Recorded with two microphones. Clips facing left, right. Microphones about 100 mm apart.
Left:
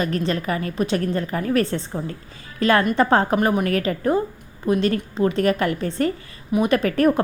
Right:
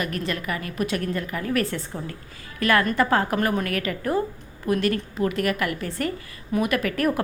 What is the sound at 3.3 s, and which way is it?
Speech, 15° left (ahead or behind).